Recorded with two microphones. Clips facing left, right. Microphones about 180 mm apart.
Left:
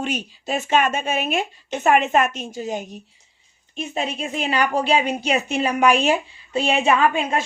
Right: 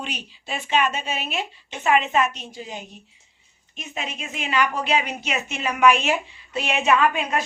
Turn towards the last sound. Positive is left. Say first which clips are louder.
# left 1 dB
turn(degrees=30)  # may be behind; listen again after turning